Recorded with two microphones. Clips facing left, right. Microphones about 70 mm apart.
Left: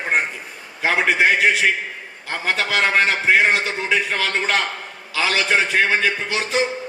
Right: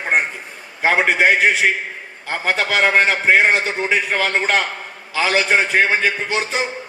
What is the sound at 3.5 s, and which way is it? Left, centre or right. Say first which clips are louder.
A man's voice: right 2 dB; right.